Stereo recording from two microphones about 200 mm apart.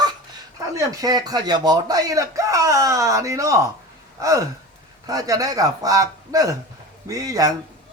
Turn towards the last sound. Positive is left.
turn(degrees=-15)  # may be behind; listen again after turning